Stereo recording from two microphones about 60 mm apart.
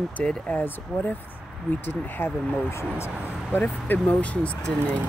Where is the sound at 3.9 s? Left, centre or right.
Left.